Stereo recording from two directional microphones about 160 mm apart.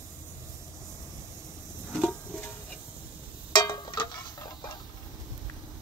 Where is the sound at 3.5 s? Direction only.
25° left (ahead or behind).